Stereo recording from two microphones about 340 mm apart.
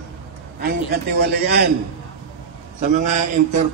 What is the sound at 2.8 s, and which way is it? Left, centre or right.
Speech, right.